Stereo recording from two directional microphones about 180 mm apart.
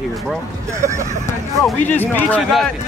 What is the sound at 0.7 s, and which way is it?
Speech, 15° right (ahead or behind).